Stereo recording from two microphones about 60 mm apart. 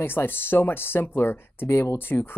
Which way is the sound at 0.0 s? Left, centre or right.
Left.